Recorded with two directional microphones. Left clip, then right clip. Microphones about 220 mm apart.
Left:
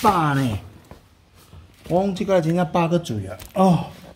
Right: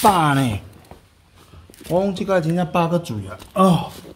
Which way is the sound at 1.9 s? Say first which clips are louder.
Right 1 dB; 5° right (ahead or behind).